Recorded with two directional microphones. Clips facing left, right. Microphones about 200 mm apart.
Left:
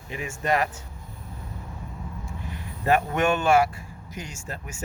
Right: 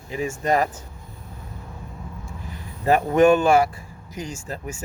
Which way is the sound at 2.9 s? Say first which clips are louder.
Right 7 dB; 35° right (ahead or behind).